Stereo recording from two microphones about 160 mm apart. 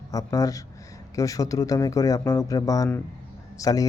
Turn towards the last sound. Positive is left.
turn(degrees=20)  # may be behind; listen again after turning